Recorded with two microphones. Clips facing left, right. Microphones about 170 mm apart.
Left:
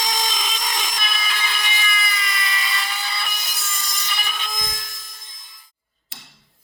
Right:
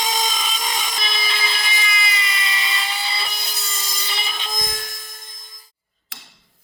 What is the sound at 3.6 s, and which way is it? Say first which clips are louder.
Wood: left 3 dB; 20° right (ahead or behind).